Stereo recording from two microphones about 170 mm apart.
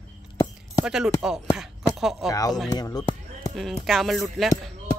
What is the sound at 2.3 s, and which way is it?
Speech, 20° left (ahead or behind).